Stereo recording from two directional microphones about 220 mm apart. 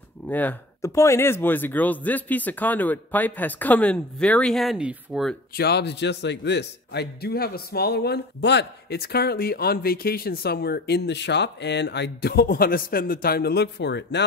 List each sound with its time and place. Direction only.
0.3 s speech: 10° left (ahead or behind)
5.6 s a man's voice: 50° left (ahead or behind)